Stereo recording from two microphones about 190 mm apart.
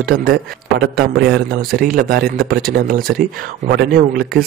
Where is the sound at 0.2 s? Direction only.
55° right (ahead or behind).